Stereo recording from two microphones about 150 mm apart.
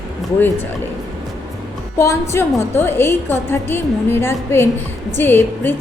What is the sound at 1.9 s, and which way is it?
A woman's voice, 20° left (ahead or behind).